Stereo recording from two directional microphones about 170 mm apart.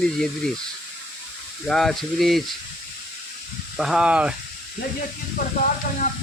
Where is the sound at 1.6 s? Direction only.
5° left (ahead or behind).